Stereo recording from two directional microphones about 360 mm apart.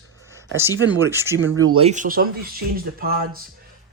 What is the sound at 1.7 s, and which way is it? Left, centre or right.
Speech, centre.